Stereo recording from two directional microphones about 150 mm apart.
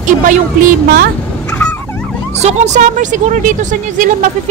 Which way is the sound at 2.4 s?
50° right (ahead or behind).